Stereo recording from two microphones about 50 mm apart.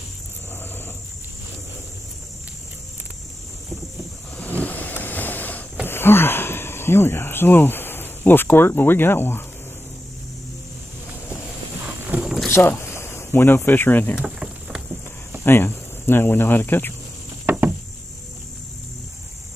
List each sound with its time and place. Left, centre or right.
4.4 s vehicle: left
5.9 s speech: left
12.1 s vehicle: right
12.4 s speech: left
14.1 s rowboat: centre
15.4 s speech: left
17.5 s a sound: right